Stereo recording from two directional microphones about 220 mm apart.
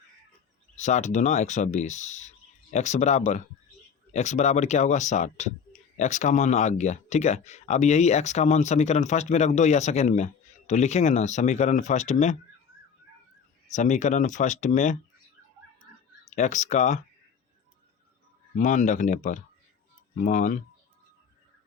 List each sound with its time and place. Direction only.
0.8 s speech: 30° left (ahead or behind)
13.7 s speech: 35° left (ahead or behind)
16.3 s speech: 30° left (ahead or behind)
18.5 s speech: 35° left (ahead or behind)